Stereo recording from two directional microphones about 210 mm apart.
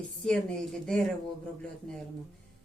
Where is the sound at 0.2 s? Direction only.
Centre (ahead or behind).